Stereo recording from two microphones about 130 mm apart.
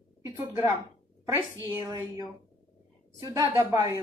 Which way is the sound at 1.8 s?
30° right (ahead or behind).